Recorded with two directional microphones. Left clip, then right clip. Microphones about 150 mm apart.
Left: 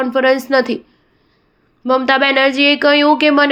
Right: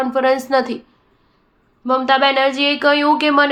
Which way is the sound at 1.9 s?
30° left (ahead or behind).